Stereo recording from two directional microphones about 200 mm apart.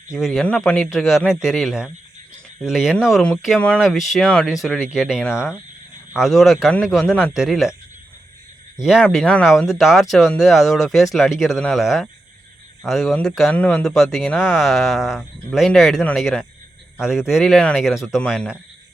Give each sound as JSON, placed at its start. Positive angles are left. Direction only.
{"t": 0.2, "sound": "speech", "side_deg": 0}
{"t": 8.8, "sound": "speech", "side_deg": 0}